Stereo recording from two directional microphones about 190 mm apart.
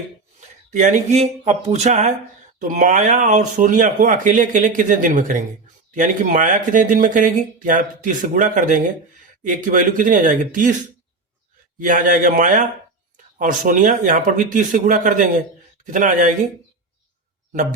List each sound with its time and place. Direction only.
0.3 s speech: 40° right (ahead or behind)
11.8 s speech: 45° right (ahead or behind)
17.5 s speech: 45° right (ahead or behind)